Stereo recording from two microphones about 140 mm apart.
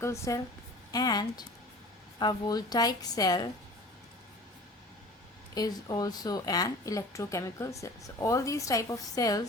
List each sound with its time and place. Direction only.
0.0 s speech: 20° left (ahead or behind)
5.5 s speech: 30° left (ahead or behind)